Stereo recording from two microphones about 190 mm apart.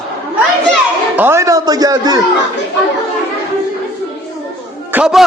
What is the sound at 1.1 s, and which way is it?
A man's voice, 10° right (ahead or behind).